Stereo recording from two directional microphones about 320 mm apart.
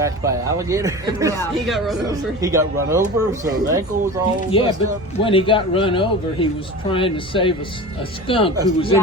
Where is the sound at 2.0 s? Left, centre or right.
Centre.